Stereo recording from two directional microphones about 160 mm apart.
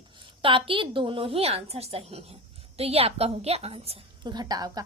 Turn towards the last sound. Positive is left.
turn(degrees=-25)  # may be behind; listen again after turning